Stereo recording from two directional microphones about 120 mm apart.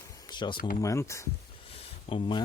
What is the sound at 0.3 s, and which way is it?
Speech, 40° left (ahead or behind).